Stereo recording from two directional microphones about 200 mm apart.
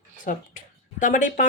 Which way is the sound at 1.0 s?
40° left (ahead or behind).